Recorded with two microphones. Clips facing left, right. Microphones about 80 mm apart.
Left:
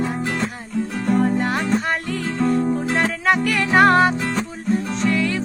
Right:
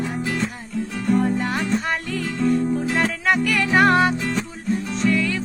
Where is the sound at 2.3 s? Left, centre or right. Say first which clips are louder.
Left 1 dB; left.